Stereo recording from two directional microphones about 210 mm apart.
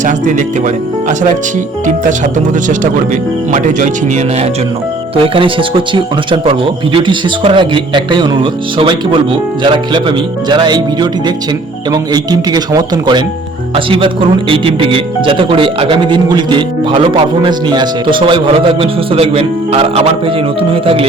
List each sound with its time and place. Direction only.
0.0 s speech: 35° right (ahead or behind)
5.1 s speech: 25° right (ahead or behind)